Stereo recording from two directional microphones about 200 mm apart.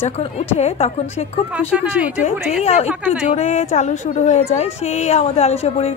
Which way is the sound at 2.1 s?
35° left (ahead or behind).